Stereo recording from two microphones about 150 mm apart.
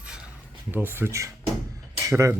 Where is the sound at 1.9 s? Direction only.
20° right (ahead or behind).